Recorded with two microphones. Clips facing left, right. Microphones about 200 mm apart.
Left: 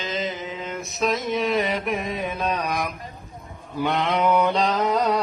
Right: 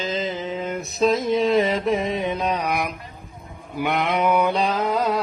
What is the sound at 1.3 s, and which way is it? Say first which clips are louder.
Mantra: right 4 dB; centre (ahead or behind).